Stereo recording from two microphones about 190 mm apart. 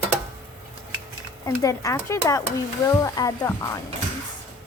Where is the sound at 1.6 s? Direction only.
15° left (ahead or behind).